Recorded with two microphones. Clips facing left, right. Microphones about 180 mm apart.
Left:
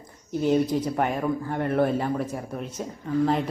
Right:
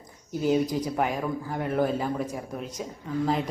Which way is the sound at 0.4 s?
5° right (ahead or behind).